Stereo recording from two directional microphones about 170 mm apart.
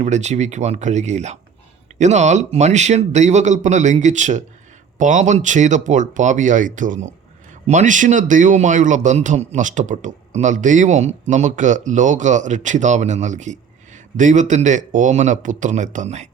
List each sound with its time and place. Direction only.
0.0 s speech: 40° right (ahead or behind)